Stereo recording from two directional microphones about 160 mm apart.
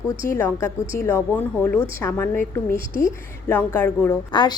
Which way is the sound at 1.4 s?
15° left (ahead or behind).